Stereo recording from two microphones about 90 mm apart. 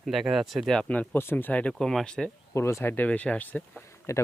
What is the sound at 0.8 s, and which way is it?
Speech, 15° left (ahead or behind).